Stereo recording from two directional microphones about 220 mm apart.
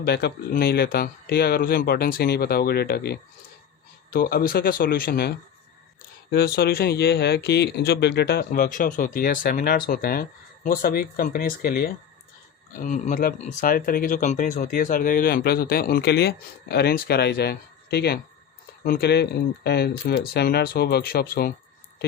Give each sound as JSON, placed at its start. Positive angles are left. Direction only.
{"t": 0.0, "sound": "speech", "side_deg": 50}